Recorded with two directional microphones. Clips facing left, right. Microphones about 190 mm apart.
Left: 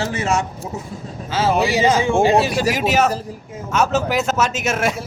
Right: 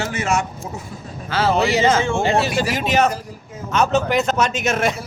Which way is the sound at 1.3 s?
15° left (ahead or behind).